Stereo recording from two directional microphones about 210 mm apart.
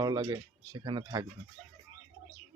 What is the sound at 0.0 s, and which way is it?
Speech, 20° right (ahead or behind).